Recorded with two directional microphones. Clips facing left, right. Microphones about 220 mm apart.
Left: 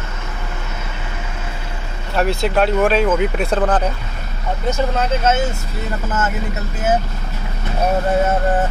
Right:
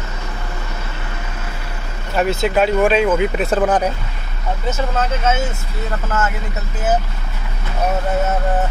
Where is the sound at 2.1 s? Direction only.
Centre (ahead or behind).